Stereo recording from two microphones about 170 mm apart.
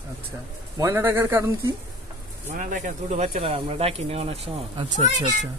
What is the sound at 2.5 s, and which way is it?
Speech, 50° right (ahead or behind).